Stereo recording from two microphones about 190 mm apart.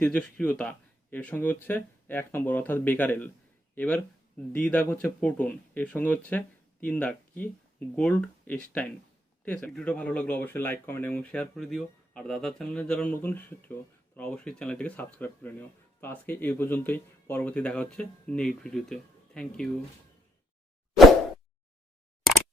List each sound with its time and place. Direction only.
0.0 s speech: 5° left (ahead or behind)